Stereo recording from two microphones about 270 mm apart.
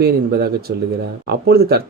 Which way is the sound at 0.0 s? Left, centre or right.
Right.